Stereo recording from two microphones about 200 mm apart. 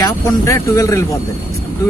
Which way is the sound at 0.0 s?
15° left (ahead or behind).